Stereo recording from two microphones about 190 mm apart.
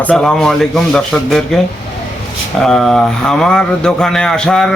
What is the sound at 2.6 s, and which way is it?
Speech, 5° left (ahead or behind).